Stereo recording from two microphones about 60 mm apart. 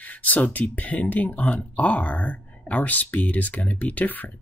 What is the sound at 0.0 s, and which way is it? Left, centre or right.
Speech, left.